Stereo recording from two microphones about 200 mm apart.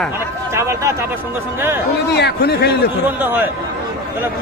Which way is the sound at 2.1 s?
55° left (ahead or behind).